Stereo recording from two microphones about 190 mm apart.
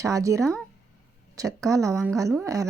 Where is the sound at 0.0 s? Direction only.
15° right (ahead or behind).